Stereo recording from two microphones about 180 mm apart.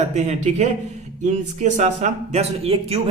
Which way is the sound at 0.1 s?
40° right (ahead or behind).